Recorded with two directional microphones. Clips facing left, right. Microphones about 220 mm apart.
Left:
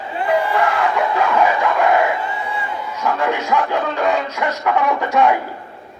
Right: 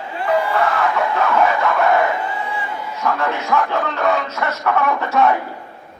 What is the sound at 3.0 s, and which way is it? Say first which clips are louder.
Music: left 1 dB; 15° left (ahead or behind).